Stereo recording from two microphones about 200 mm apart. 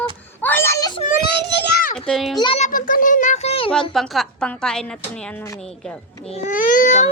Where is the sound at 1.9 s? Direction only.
Centre (ahead or behind).